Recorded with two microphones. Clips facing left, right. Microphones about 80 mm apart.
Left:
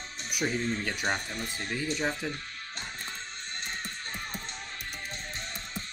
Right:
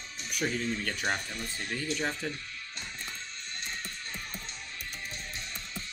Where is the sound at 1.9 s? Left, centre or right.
Centre.